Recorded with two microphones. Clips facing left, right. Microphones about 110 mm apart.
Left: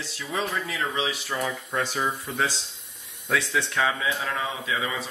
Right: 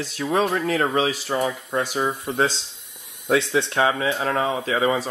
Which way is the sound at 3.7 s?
40° right (ahead or behind).